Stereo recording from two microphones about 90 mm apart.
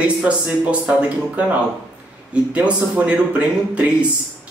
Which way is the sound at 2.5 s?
15° right (ahead or behind).